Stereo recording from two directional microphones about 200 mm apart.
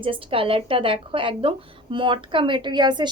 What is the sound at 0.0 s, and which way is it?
Speech, 25° right (ahead or behind).